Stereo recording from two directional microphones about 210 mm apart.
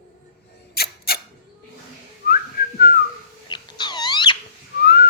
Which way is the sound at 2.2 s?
45° left (ahead or behind).